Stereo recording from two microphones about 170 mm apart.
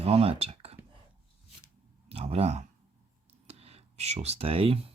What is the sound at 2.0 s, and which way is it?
Speech, 35° right (ahead or behind).